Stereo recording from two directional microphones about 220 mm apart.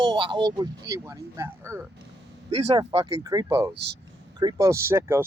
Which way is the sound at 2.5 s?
30° right (ahead or behind).